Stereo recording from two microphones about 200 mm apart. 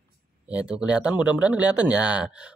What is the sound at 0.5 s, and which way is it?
Speech, 5° right (ahead or behind).